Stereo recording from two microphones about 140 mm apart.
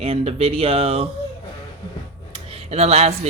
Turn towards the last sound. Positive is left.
turn(degrees=-50)  # may be behind; listen again after turning